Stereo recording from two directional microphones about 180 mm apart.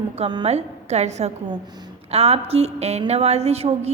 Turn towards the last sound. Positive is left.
turn(degrees=-35)  # may be behind; listen again after turning